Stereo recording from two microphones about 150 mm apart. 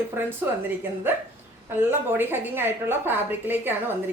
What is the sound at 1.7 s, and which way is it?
A woman's voice, 15° right (ahead or behind).